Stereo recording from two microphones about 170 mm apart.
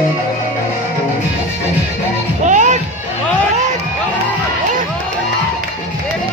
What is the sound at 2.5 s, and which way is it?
Music, 45° right (ahead or behind).